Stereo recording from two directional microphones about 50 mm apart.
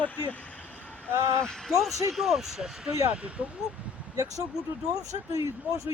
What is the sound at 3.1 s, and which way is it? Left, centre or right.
Speech, right.